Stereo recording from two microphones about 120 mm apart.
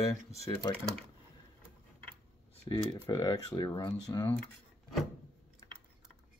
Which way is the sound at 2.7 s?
40° left (ahead or behind).